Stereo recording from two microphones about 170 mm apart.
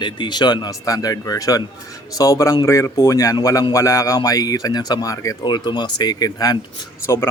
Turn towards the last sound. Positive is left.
turn(degrees=20)  # may be behind; listen again after turning